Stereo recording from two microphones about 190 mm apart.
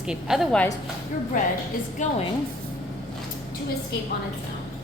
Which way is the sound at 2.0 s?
40° left (ahead or behind).